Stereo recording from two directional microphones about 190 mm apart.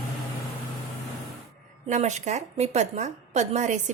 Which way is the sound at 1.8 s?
40° right (ahead or behind).